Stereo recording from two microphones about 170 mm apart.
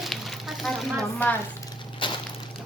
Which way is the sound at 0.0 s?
Centre (ahead or behind).